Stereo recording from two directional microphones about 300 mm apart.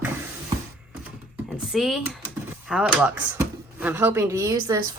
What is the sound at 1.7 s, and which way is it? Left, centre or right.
Speech, centre.